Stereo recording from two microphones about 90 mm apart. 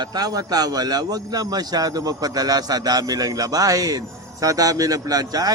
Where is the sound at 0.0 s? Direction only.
50° right (ahead or behind).